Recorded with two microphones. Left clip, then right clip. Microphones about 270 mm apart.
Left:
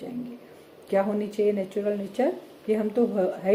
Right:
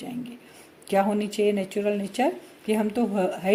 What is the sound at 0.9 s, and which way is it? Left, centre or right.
Speech, right.